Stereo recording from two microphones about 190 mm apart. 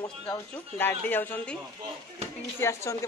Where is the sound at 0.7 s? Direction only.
10° left (ahead or behind).